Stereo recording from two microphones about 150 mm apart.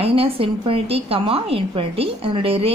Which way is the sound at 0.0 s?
40° right (ahead or behind).